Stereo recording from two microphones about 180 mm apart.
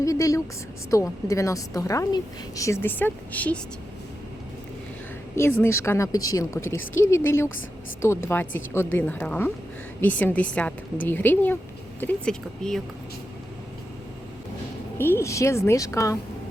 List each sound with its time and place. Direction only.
0.0 s a woman's voice: 20° left (ahead or behind)
5.3 s a woman's voice: 10° left (ahead or behind)
6.7 s a woman's voice: 90° left
8.0 s a woman's voice: 15° left (ahead or behind)
14.9 s a woman's voice: 15° left (ahead or behind)